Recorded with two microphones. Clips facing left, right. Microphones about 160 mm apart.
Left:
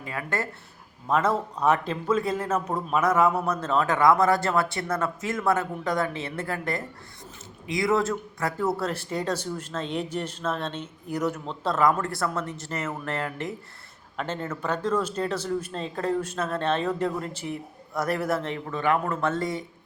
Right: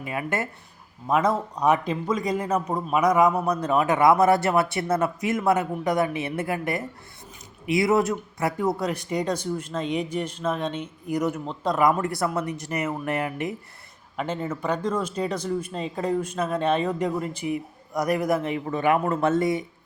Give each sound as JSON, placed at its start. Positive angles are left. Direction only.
{"t": 0.0, "sound": "a man's voice", "side_deg": -20}